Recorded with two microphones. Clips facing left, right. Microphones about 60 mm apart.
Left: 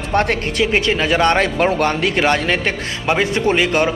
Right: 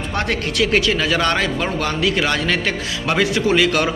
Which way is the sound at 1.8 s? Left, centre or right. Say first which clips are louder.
Left 3 dB; left.